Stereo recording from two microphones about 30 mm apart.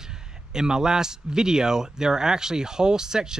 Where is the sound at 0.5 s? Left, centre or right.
Right.